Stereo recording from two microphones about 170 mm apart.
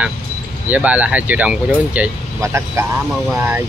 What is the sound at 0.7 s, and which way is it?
Speech, 10° right (ahead or behind).